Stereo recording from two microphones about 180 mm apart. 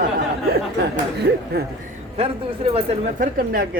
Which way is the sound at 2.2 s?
35° right (ahead or behind).